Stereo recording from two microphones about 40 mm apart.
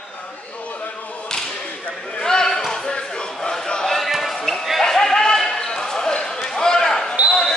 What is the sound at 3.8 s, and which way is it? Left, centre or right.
Basketball bounce, centre.